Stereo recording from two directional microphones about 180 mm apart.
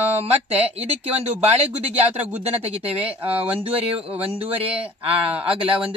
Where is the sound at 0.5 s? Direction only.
35° right (ahead or behind).